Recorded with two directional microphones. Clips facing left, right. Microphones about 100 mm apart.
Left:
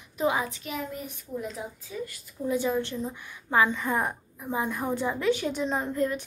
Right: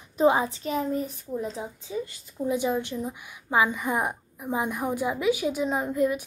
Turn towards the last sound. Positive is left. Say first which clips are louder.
# right 3 dB
turn(degrees=-10)  # may be behind; listen again after turning